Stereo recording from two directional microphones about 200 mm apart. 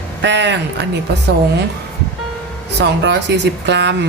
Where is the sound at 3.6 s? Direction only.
60° right (ahead or behind).